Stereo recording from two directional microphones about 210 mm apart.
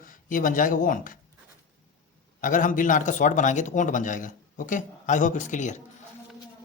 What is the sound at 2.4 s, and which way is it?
Speech, 40° left (ahead or behind).